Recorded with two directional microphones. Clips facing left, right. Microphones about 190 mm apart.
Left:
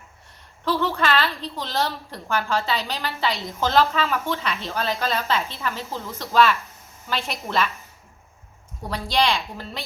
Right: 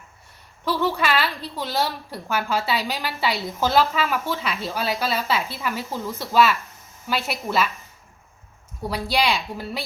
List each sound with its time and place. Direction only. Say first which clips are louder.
0.6 s a woman's voice: even; 10° right (ahead or behind)
8.9 s a woman's voice: even; 10° right (ahead or behind)